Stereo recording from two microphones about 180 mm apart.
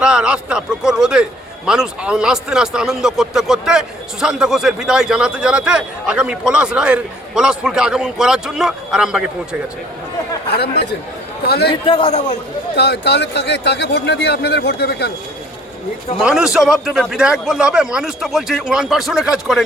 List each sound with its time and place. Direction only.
0.0 s speech: 5° right (ahead or behind)
10.5 s speech: 65° left (ahead or behind)
11.7 s a man's voice: 30° left (ahead or behind)
12.7 s speech: 65° left (ahead or behind)
16.2 s speech: 5° right (ahead or behind)